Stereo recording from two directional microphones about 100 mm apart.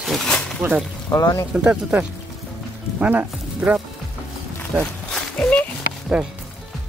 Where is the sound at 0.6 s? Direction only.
25° right (ahead or behind).